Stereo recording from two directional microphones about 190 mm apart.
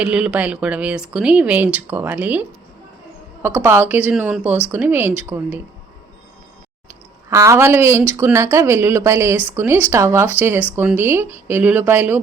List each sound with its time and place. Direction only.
0.0 s speech: 5° right (ahead or behind)
7.3 s speech: 15° right (ahead or behind)